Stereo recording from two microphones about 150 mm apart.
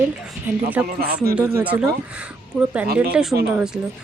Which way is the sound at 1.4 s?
15° right (ahead or behind).